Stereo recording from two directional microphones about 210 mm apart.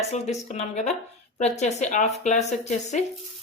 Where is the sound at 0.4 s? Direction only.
30° left (ahead or behind).